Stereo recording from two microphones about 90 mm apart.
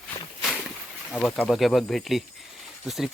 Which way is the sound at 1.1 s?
15° left (ahead or behind).